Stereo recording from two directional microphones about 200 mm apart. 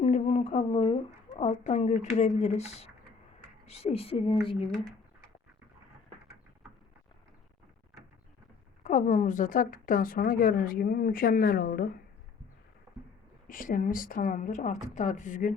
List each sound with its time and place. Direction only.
0.0 s a sound: 35° left (ahead or behind)
1.3 s a woman's voice: 35° left (ahead or behind)
8.8 s speech: 40° left (ahead or behind)
13.5 s a woman's voice: 45° left (ahead or behind)